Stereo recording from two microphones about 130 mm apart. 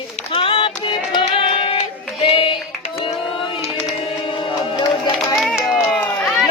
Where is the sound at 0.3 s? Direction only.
45° left (ahead or behind).